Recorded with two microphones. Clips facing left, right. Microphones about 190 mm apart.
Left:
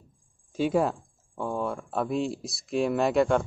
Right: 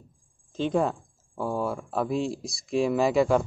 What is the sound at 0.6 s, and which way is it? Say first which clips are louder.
A man's voice: left 1 dB; 5° left (ahead or behind).